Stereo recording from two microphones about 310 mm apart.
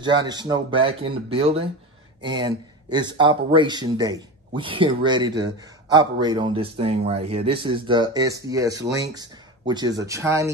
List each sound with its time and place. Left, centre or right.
0.0 s a man's voice: centre